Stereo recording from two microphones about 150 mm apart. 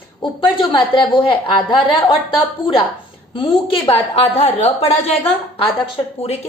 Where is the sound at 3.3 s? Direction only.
35° left (ahead or behind).